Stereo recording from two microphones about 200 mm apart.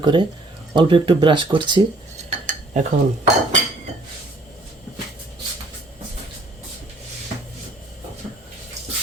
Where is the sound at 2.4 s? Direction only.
35° right (ahead or behind).